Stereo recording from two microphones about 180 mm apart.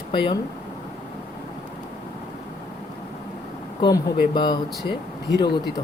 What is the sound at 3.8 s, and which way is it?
Speech, 25° left (ahead or behind).